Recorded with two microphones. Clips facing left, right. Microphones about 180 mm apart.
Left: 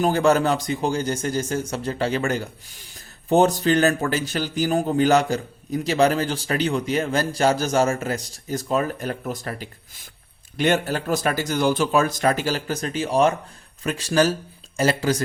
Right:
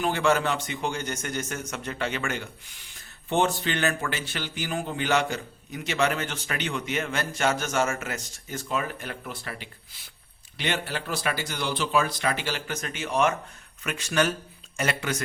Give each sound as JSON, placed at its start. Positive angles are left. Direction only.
{"t": 0.0, "sound": "a man's voice", "side_deg": 40}